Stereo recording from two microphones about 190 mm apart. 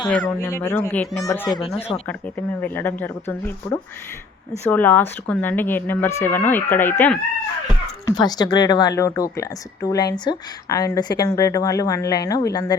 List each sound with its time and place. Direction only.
0.3 s speech: 15° left (ahead or behind)
8.0 s speech: 20° left (ahead or behind)